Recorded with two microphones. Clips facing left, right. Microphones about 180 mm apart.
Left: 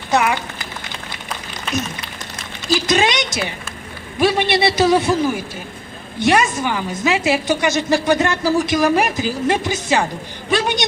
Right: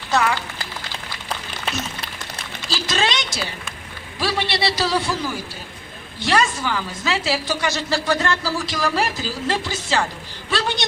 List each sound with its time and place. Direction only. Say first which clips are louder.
0.1 s a woman's voice: left 3 dB; 20° left (ahead or behind)
2.6 s a woman's voice: left 6 dB; 15° left (ahead or behind)